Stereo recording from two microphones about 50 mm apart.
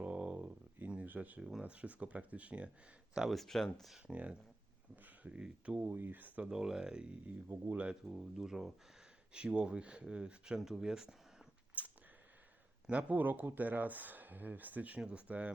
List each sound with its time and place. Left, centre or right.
0.0 s a sound: right
1.4 s speech: centre
1.6 s speech: right
3.2 s speech: centre
4.0 s speech: right
5.9 s speech: right
6.4 s speech: centre
7.3 s speech: right
8.1 s speech: centre
9.3 s speech: right
10.6 s speech: centre
11.8 s a sound: right
12.9 s speech: right